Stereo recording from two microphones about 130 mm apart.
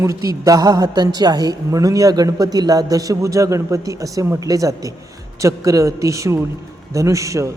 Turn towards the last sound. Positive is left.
turn(degrees=-25)  # may be behind; listen again after turning